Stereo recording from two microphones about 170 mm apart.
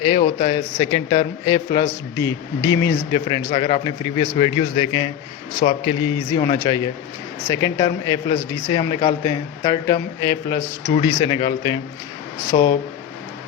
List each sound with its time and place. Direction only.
0.1 s a man's voice: 30° left (ahead or behind)
6.3 s speech: 20° left (ahead or behind)